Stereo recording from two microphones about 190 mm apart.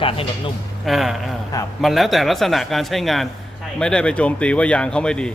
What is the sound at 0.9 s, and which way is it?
Speech, centre (ahead or behind).